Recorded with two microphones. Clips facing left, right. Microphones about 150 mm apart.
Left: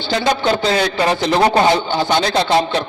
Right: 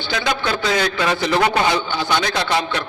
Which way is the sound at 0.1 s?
35° left (ahead or behind).